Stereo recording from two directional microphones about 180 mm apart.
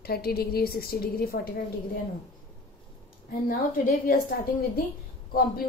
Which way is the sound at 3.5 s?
50° left (ahead or behind).